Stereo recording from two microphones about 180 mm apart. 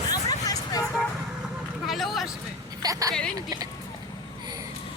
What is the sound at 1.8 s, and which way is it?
Speech, centre (ahead or behind).